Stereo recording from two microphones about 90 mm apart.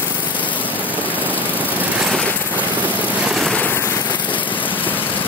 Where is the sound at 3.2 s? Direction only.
5° right (ahead or behind).